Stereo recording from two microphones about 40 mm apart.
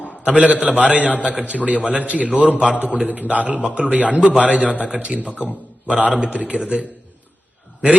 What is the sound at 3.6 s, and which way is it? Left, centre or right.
A man's voice, right.